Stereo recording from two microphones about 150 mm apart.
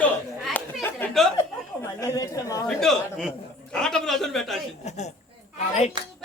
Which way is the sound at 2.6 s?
5° left (ahead or behind).